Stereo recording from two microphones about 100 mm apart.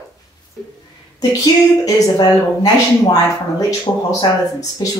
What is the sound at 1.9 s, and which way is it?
Speech, 40° left (ahead or behind).